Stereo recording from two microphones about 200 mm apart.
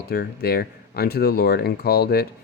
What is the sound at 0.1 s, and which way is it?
Speech, 50° left (ahead or behind).